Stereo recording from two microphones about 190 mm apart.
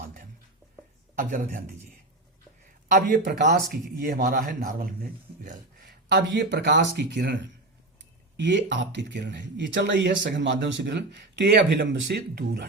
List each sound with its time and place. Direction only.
1.1 s speech: 45° right (ahead or behind)
2.9 s speech: 45° right (ahead or behind)
6.1 s speech: 65° right (ahead or behind)